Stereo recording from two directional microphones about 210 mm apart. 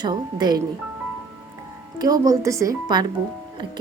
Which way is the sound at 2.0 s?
15° right (ahead or behind).